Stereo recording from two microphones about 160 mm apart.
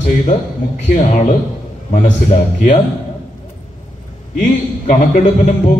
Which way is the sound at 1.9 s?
50° left (ahead or behind).